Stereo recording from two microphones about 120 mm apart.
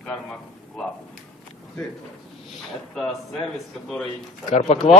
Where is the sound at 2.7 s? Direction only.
5° left (ahead or behind).